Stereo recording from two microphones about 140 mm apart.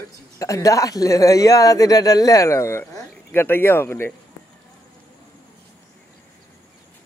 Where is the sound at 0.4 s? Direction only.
25° left (ahead or behind).